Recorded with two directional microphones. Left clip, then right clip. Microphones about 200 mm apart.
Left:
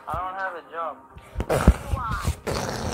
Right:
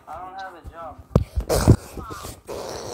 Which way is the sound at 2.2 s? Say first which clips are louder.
Left 4 dB; 30° right (ahead or behind).